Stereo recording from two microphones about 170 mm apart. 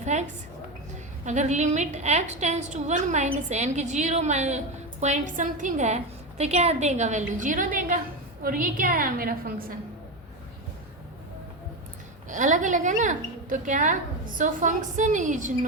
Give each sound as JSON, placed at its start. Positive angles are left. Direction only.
{"t": 0.0, "sound": "a sound", "side_deg": -40}
{"t": 1.2, "sound": "a woman's voice", "side_deg": -45}
{"t": 12.3, "sound": "a woman's voice", "side_deg": -50}